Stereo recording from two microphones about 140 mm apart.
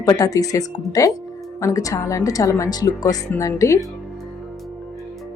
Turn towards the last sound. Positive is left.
turn(degrees=20)  # may be behind; listen again after turning